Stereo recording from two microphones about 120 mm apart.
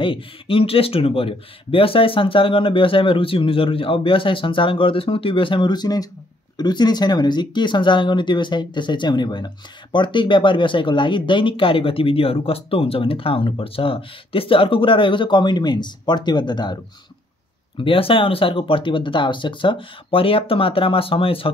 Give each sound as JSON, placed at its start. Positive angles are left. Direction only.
{"t": 0.0, "sound": "speech", "side_deg": 45}
{"t": 17.7, "sound": "speech", "side_deg": 50}